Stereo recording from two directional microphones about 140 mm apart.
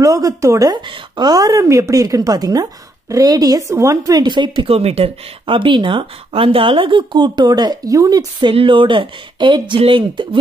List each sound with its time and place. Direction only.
0.0 s a woman's voice: 25° right (ahead or behind)